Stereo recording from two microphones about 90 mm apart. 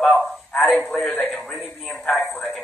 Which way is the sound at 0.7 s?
10° left (ahead or behind).